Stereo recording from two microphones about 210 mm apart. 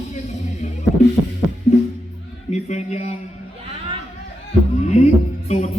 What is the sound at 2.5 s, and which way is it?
Music, 35° left (ahead or behind).